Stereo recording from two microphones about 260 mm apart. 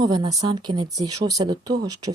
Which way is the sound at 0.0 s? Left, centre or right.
Centre.